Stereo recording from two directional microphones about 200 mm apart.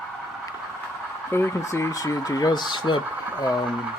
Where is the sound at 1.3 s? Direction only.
15° left (ahead or behind).